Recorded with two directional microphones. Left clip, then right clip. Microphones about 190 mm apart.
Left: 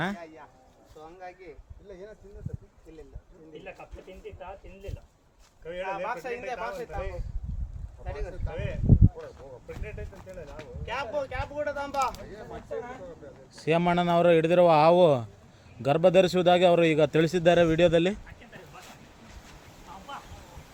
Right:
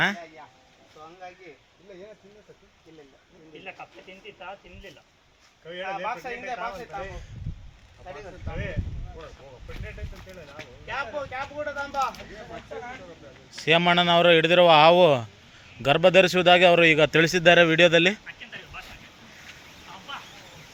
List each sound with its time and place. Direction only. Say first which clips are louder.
5.8 s speech: right 2 dB; 20° left (ahead or behind)
9.2 s speech: left 1 dB; 50° left (ahead or behind)
10.8 s speech: even; 30° left (ahead or behind)
13.7 s a man's voice: right 5 dB; 5° left (ahead or behind)